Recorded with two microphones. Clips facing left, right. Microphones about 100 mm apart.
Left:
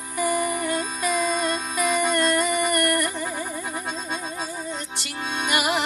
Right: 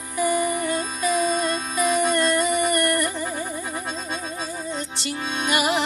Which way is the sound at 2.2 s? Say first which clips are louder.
Right 1 dB; 50° left (ahead or behind).